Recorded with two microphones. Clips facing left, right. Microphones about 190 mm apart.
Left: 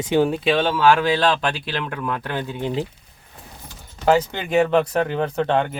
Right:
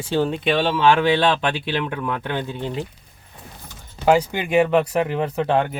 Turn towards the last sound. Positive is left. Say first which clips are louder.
# even
turn(degrees=-5)  # may be behind; listen again after turning